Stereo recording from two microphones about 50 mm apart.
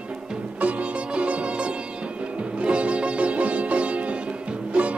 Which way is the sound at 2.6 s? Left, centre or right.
Right.